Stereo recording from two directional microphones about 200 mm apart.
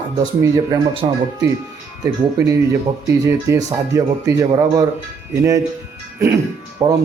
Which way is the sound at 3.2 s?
15° right (ahead or behind).